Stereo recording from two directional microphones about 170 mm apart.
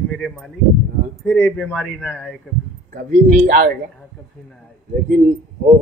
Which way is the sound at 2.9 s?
45° right (ahead or behind).